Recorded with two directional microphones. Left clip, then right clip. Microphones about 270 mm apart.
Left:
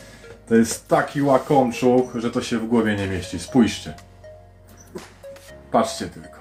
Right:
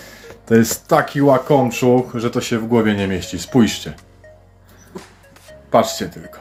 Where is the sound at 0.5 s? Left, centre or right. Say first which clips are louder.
Right 4 dB; right.